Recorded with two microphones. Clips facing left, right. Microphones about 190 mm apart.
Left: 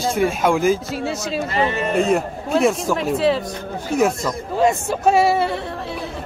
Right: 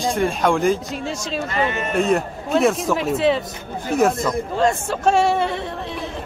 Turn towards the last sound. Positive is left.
turn(degrees=5)  # may be behind; listen again after turning